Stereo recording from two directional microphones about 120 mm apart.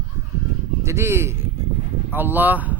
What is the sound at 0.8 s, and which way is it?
Speech, 20° right (ahead or behind).